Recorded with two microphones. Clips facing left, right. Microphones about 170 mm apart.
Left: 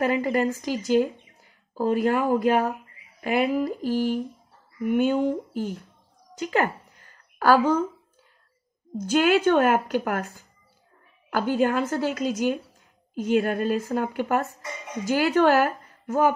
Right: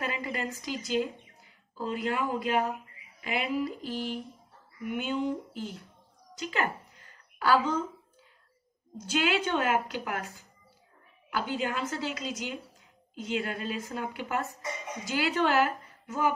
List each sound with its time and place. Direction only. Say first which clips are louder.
0.0 s a woman's voice: left 11 dB; 55° left (ahead or behind)
6.4 s a sound: left 7 dB; 50° left (ahead or behind)
9.0 s a woman's voice: left 9 dB; 50° left (ahead or behind)